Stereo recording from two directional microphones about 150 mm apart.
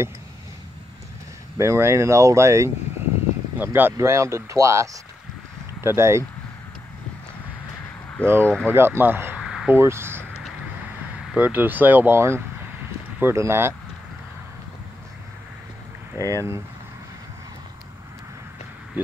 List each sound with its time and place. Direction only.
1.6 s speech: 20° right (ahead or behind)
8.2 s speech: 15° right (ahead or behind)
9.4 s a sound: 5° right (ahead or behind)
9.8 s speech: 15° right (ahead or behind)
11.3 s speech: 10° right (ahead or behind)
16.2 s speech: 20° right (ahead or behind)